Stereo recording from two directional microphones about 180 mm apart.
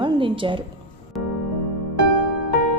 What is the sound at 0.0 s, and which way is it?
Speech, 30° right (ahead or behind).